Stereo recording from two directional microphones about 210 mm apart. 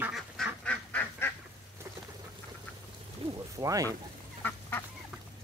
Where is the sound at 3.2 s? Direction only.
25° right (ahead or behind).